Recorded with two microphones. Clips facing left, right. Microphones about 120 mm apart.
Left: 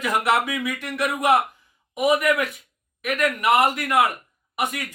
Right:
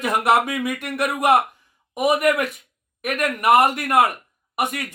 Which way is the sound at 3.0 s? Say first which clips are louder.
Even; 50° right (ahead or behind).